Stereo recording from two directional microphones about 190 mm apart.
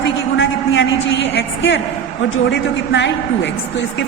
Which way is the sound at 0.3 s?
75° left (ahead or behind).